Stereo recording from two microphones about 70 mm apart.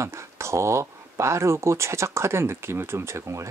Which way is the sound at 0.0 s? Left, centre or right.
Right.